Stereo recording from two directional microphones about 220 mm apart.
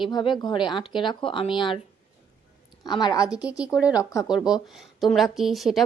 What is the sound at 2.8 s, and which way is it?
Speech, 20° left (ahead or behind).